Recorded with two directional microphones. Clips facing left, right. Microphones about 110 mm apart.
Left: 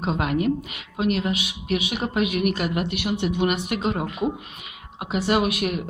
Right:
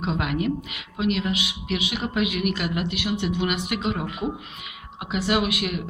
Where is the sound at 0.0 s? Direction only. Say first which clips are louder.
Left 2 dB; 40° left (ahead or behind).